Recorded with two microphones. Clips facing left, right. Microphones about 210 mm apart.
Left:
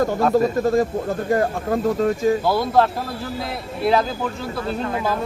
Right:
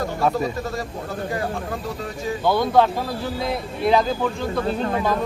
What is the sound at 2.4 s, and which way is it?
Speech, 5° left (ahead or behind).